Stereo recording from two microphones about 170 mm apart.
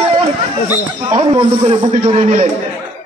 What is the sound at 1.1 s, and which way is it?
A man's voice, 30° right (ahead or behind).